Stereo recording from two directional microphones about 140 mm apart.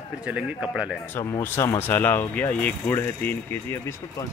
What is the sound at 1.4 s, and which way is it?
Speech, 15° left (ahead or behind).